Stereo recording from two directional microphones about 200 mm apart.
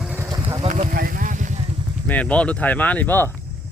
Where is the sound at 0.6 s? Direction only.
35° right (ahead or behind).